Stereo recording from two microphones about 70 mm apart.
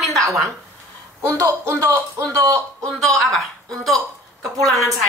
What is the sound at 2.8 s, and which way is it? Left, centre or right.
Speech, centre.